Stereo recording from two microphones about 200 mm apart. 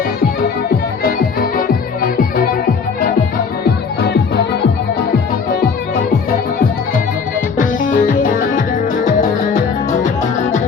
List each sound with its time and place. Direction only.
1.0 s music: 45° left (ahead or behind)
7.5 s music: 40° left (ahead or behind)